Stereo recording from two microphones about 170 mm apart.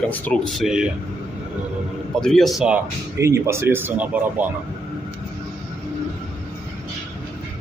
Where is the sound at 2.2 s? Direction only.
Centre (ahead or behind).